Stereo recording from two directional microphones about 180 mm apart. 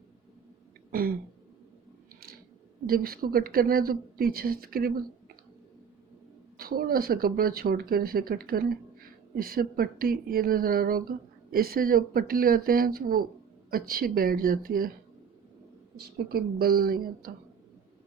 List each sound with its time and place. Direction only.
0.9 s throat clearing: 55° right (ahead or behind)
2.8 s a woman's voice: 55° right (ahead or behind)
6.6 s a woman's voice: 55° right (ahead or behind)
16.0 s speech: 60° right (ahead or behind)